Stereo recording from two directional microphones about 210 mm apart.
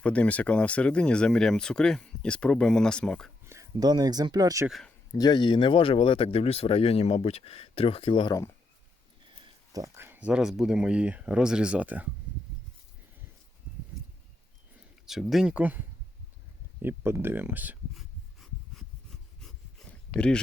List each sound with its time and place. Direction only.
0.0 s speech: 5° left (ahead or behind)
3.4 s speech: 15° right (ahead or behind)
4.7 s speech: 5° left (ahead or behind)
5.1 s speech: 20° left (ahead or behind)
9.7 s speech: 15° right (ahead or behind)
15.0 s speech: centre (ahead or behind)
16.8 s a sound: 10° right (ahead or behind)
20.1 s speech: 5° left (ahead or behind)